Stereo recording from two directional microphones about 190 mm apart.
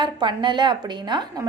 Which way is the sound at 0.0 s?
25° right (ahead or behind).